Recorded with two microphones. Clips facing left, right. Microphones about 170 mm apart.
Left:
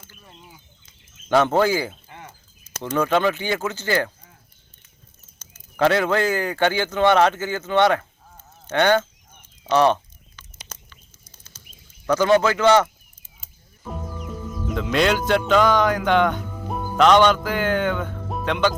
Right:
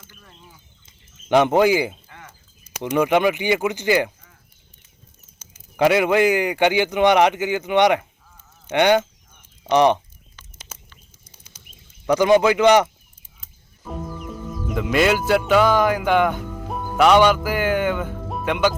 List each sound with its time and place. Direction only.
1.3 s a man's voice: 15° right (ahead or behind)
2.0 s bird: 25° left (ahead or behind)
2.6 s a man's voice: 10° right (ahead or behind)
5.4 s a man's voice: 10° right (ahead or behind)
9.6 s a sound: 15° right (ahead or behind)
10.7 s bird: 10° right (ahead or behind)
11.3 s bird flight: 15° right (ahead or behind)
12.0 s a man's voice: 15° right (ahead or behind)
14.7 s a man's voice: 5° right (ahead or behind)